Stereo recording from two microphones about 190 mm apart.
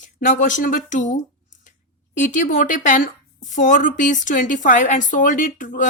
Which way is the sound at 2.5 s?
45° left (ahead or behind).